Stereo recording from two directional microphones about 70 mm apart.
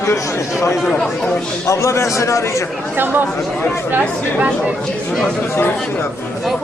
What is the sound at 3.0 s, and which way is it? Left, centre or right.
Speech, right.